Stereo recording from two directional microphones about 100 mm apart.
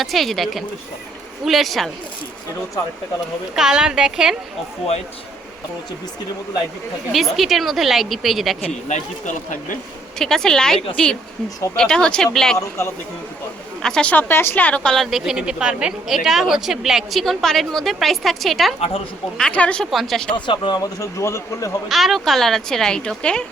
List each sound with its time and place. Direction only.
0.0 s a woman's voice: centre (ahead or behind)
3.5 s a woman's voice: 5° right (ahead or behind)
7.1 s a woman's voice: centre (ahead or behind)
10.2 s a woman's voice: 5° left (ahead or behind)
12.5 s speech: 30° left (ahead or behind)
13.8 s speech: 10° left (ahead or behind)
14.9 s a woman's voice: centre (ahead or behind)
19.4 s a woman's voice: 10° left (ahead or behind)
20.3 s speech: 50° left (ahead or behind)
20.8 s a man's voice: 30° left (ahead or behind)
21.8 s a woman's voice: centre (ahead or behind)